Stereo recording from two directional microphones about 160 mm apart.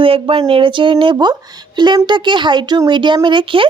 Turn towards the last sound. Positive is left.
turn(degrees=-30)  # may be behind; listen again after turning